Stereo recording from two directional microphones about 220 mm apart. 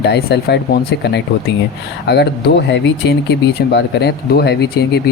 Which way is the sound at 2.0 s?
50° left (ahead or behind).